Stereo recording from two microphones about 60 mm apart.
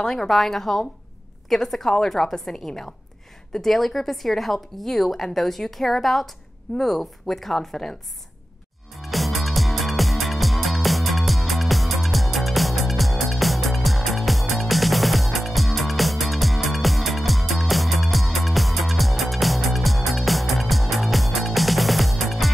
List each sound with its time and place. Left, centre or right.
0.0 s a woman's voice: centre
8.9 s music: centre